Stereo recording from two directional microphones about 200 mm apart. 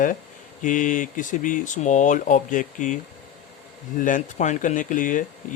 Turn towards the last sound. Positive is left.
turn(degrees=40)  # may be behind; listen again after turning